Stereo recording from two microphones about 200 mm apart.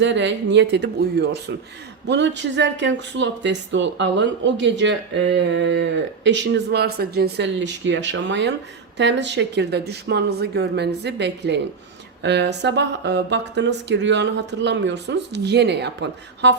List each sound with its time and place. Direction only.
0.0 s speech: 65° right (ahead or behind)